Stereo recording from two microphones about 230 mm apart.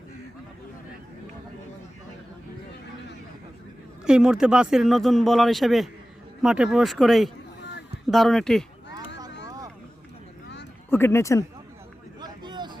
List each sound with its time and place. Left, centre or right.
4.0 s speech: centre
10.8 s speech: centre
12.2 s vehicle: centre